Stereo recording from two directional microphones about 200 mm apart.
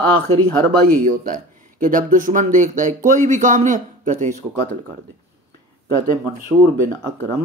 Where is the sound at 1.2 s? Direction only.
40° right (ahead or behind).